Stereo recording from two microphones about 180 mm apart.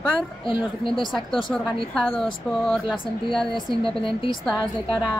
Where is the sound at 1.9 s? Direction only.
5° left (ahead or behind).